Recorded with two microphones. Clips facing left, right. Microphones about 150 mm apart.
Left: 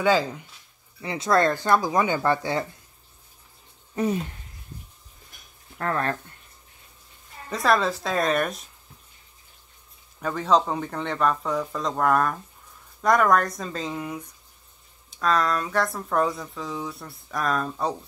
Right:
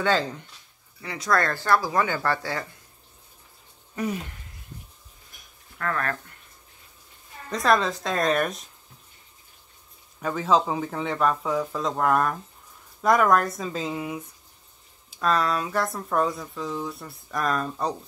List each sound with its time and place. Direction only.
0.0 s speech: 10° left (ahead or behind)
1.0 s speech: 25° left (ahead or behind)
3.9 s speech: 25° left (ahead or behind)
5.8 s speech: 30° left (ahead or behind)
7.4 s speech: centre (ahead or behind)
10.2 s speech: centre (ahead or behind)